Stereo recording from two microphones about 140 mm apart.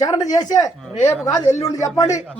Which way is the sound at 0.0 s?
30° left (ahead or behind).